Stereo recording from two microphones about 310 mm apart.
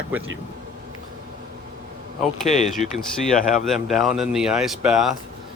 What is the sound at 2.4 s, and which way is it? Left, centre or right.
Speech, left.